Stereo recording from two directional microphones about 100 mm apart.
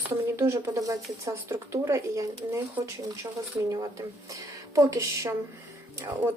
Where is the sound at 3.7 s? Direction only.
35° right (ahead or behind).